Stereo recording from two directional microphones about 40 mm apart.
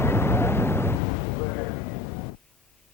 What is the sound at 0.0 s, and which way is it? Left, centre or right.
Vehicle, left.